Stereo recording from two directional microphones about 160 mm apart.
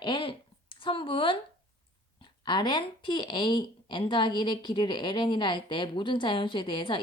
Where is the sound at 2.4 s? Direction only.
30° left (ahead or behind).